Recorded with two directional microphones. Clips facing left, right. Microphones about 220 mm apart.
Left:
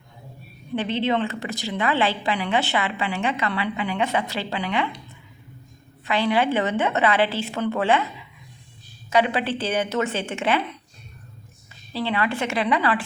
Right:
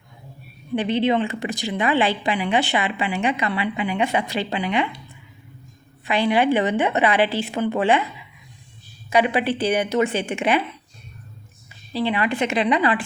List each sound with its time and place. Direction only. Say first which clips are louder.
0.8 s speech: right 3 dB; 15° right (ahead or behind)
6.1 s speech: right 3 dB; 15° right (ahead or behind)
9.0 s speech: right 2 dB; 15° right (ahead or behind)
11.9 s speech: right 3 dB; 15° right (ahead or behind)